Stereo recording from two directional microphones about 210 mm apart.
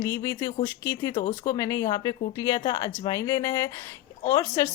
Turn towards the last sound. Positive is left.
turn(degrees=15)  # may be behind; listen again after turning